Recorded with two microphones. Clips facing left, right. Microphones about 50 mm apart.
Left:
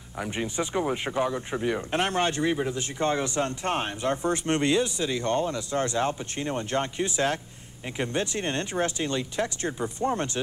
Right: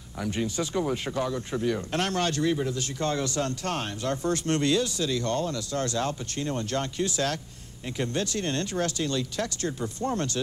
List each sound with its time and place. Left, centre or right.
0.2 s speech: left